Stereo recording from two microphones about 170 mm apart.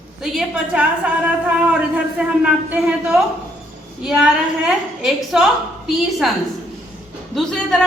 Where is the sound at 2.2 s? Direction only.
5° right (ahead or behind).